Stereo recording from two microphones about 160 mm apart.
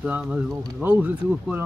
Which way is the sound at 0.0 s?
5° right (ahead or behind).